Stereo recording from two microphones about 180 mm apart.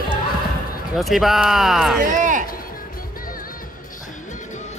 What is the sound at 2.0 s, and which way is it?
Run, 45° right (ahead or behind).